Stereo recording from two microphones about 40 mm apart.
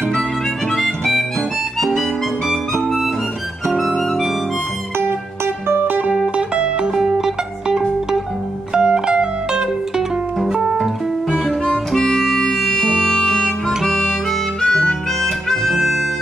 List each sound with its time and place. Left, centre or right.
0.7 s harmonica: centre
2.0 s music: centre
3.7 s music: centre
4.9 s music: right
6.3 s music: right
6.9 s music: centre
11.9 s music: centre
14.6 s harmonica: centre